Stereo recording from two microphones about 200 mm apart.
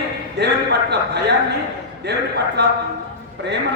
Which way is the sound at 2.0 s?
55° right (ahead or behind).